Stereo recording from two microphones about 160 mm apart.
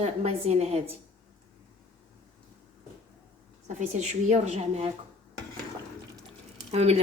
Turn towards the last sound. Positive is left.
turn(degrees=-40)  # may be behind; listen again after turning